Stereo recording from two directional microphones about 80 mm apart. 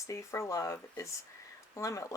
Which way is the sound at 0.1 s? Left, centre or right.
Left.